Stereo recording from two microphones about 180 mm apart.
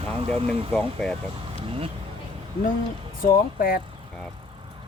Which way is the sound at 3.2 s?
50° left (ahead or behind).